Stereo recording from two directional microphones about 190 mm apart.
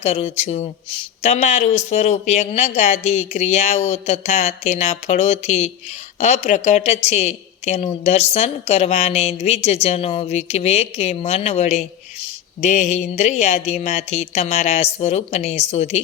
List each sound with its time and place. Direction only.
0.0 s a woman's voice: 35° left (ahead or behind)